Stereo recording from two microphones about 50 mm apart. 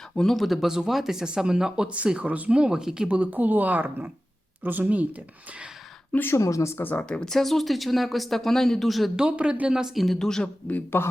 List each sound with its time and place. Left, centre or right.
0.2 s speech: centre
2.1 s speech: right
3.1 s speech: right
6.3 s speech: left
7.0 s speech: centre
7.3 s speech: centre
9.1 s speech: right; by 10.2 s centre
10.2 s speech: centre
10.9 s speech: left